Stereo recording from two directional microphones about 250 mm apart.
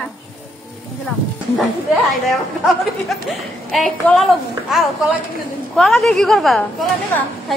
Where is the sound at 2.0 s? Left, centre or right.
Centre.